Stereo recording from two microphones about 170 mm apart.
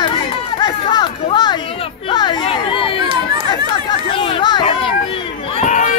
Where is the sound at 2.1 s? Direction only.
30° left (ahead or behind).